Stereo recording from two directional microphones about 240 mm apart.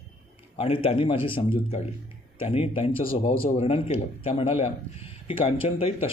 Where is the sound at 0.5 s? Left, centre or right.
Left.